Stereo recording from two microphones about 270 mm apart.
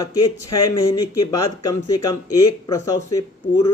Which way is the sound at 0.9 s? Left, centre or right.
Centre.